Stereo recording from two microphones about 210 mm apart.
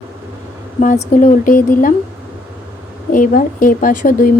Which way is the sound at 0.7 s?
35° left (ahead or behind).